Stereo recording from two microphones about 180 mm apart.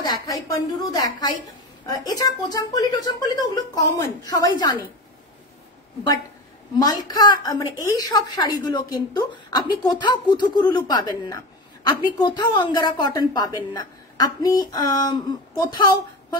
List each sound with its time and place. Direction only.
0.0 s a woman's voice: 20° left (ahead or behind)
6.8 s a woman's voice: 20° left (ahead or behind)